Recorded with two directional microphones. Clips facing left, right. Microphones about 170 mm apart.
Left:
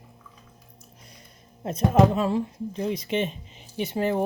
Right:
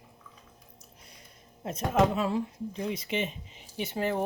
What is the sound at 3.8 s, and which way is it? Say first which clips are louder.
Speech: left 5 dB; 20° left (ahead or behind).